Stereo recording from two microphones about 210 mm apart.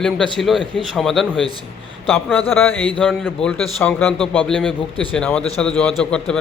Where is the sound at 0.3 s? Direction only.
Centre (ahead or behind).